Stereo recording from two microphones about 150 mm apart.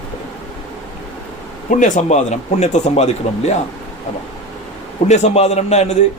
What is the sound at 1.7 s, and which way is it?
Speech, 55° left (ahead or behind).